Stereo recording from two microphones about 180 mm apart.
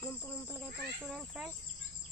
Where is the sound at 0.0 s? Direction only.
15° left (ahead or behind).